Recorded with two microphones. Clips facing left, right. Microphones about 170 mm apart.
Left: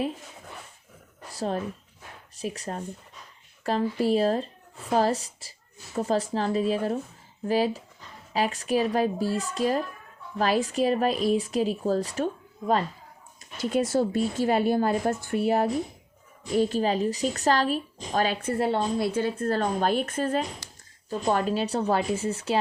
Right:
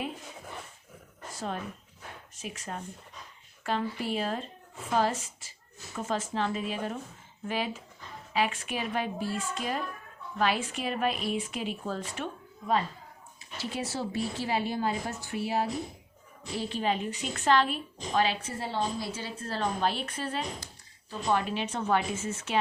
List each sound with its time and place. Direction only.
1.3 s a woman's voice: 35° left (ahead or behind); by 15.7 s 55° left (ahead or behind)
16.6 s a woman's voice: 40° left (ahead or behind)
20.6 s a sound: 80° left
21.1 s a woman's voice: 45° left (ahead or behind)